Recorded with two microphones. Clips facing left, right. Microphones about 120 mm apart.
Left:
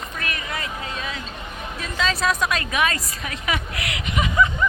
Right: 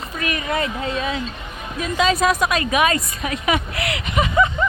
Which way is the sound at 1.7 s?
15° right (ahead or behind).